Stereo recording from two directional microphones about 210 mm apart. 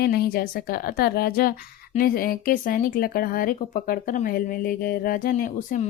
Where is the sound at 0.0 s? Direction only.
45° left (ahead or behind).